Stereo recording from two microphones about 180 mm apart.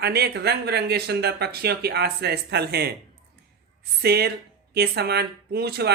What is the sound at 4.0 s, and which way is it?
Speech, 60° right (ahead or behind).